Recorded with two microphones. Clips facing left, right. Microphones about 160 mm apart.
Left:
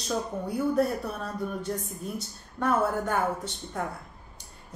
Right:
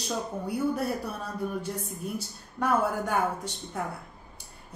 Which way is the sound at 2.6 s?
10° right (ahead or behind).